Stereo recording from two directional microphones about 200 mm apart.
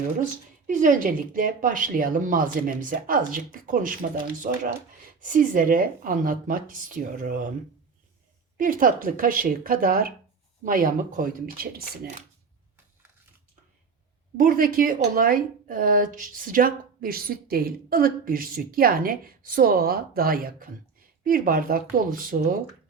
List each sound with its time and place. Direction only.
0.7 s speech: 40° right (ahead or behind)
8.5 s speech: 45° right (ahead or behind)
14.3 s speech: 45° right (ahead or behind)